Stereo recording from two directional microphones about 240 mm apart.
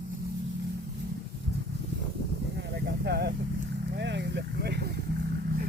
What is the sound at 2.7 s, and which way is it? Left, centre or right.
Vehicle, right.